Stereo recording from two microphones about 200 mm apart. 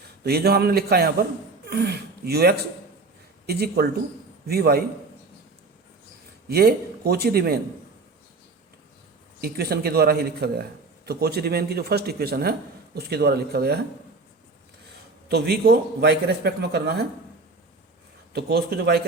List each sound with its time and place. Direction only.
0.3 s a man's voice: 50° right (ahead or behind)
6.5 s a man's voice: 50° right (ahead or behind)
9.4 s a man's voice: 50° right (ahead or behind)
15.3 s a man's voice: 55° right (ahead or behind)
18.3 s a man's voice: 55° right (ahead or behind)